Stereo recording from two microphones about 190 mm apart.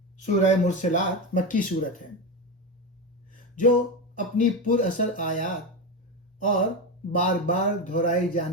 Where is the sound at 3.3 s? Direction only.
45° left (ahead or behind).